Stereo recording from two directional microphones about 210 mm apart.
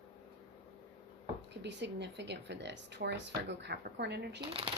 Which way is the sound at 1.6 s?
55° right (ahead or behind).